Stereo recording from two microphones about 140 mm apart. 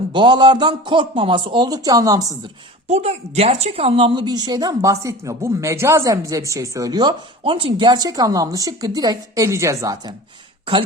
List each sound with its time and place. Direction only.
0.1 s speech: 35° right (ahead or behind)
2.8 s a woman's voice: 50° right (ahead or behind); by 10.2 s 25° right (ahead or behind)